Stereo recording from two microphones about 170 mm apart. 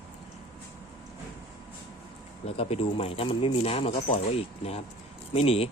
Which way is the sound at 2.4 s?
35° left (ahead or behind).